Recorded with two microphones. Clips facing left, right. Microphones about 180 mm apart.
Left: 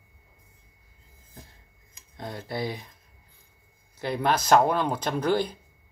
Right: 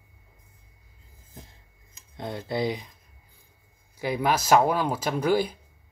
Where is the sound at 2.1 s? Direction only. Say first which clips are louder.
Right 4 dB; 25° right (ahead or behind).